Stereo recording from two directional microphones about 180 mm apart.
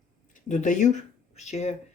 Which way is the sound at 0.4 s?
45° left (ahead or behind).